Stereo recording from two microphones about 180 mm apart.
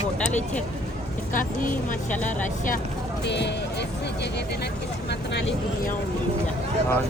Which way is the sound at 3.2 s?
75° left (ahead or behind).